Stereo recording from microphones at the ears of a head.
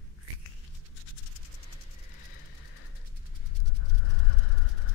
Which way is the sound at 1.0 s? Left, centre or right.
Left.